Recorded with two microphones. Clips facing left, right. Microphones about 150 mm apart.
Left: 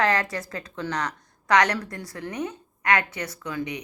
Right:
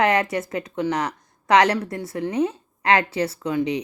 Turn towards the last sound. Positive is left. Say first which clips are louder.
# right 8 dB
turn(degrees=-25)  # may be behind; listen again after turning